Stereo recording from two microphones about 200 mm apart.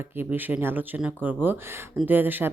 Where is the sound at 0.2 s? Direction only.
10° right (ahead or behind).